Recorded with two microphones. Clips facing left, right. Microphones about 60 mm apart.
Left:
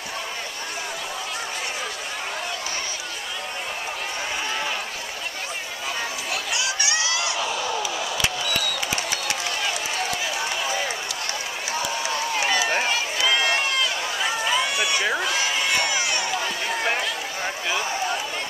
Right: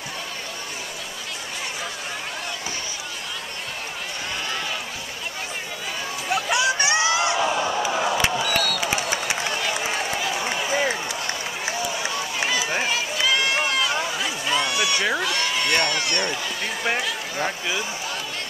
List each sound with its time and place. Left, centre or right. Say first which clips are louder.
6.3 s crowd: right 8 dB; right
8.4 s a sound: right 3 dB; centre
9.1 s run: right 2 dB; right
13.2 s run: even; centre
14.2 s a sound: left 1 dB; centre
16.8 s run: right 3 dB; centre